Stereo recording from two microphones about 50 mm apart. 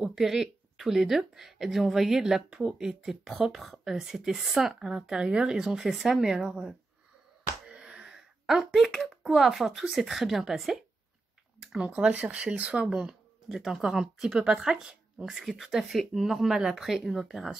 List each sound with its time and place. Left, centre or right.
0.0 s speech: centre
7.7 s speech: centre
11.7 s speech: right
12.9 s speech: centre